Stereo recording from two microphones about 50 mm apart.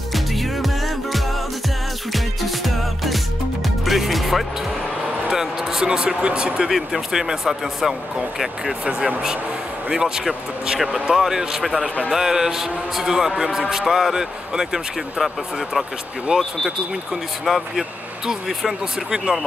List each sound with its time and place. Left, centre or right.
0.1 s music: centre
5.3 s speech: centre
6.7 s speech: centre